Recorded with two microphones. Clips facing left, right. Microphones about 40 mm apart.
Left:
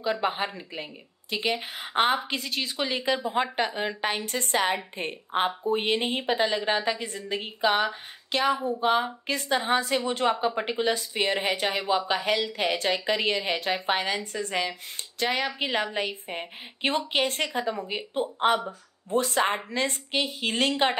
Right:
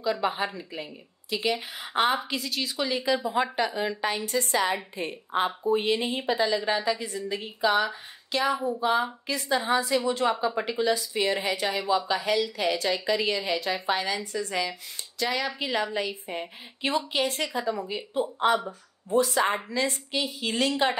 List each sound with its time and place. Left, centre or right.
0.0 s a woman's voice: left